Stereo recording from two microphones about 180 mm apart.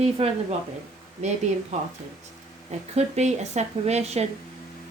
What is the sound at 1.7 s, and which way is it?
Speech, 40° right (ahead or behind).